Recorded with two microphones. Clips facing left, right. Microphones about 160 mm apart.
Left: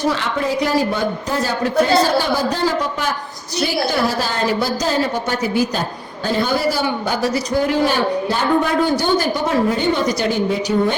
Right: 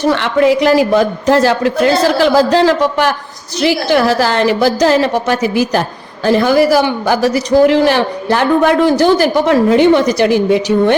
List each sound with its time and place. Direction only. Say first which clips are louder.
0.0 s a man's voice: right 8 dB; 70° right (ahead or behind)